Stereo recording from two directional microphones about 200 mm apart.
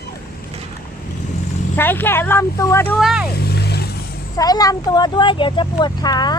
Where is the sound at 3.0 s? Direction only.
Centre (ahead or behind).